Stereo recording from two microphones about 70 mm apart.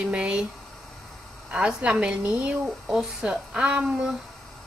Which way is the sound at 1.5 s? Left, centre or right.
Centre.